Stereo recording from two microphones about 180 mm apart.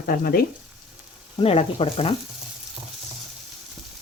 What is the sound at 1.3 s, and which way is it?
Speech, 35° left (ahead or behind).